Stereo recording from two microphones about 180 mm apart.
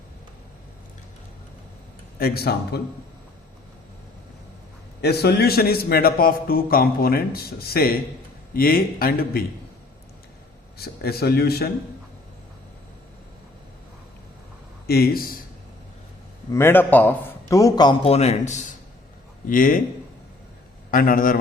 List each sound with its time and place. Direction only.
2.1 s a man's voice: 55° left (ahead or behind)
5.0 s a man's voice: 65° left (ahead or behind)
10.8 s a man's voice: 60° left (ahead or behind)
14.8 s speech: 60° left (ahead or behind)
16.5 s a man's voice: 15° left (ahead or behind)
18.0 s a man's voice: 35° left (ahead or behind)
20.9 s a man's voice: 50° left (ahead or behind)